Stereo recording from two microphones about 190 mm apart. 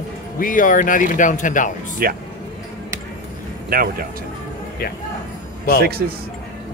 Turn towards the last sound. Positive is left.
turn(degrees=-55)  # may be behind; listen again after turning